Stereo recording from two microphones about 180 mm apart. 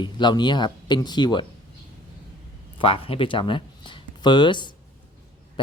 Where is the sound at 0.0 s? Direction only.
25° left (ahead or behind).